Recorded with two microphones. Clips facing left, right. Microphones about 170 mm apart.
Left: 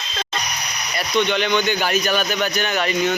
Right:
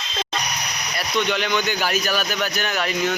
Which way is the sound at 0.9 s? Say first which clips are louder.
Left 3 dB; 5° right (ahead or behind).